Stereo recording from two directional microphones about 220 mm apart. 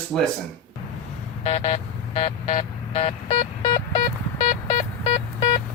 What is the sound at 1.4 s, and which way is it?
Vehicle, 30° left (ahead or behind).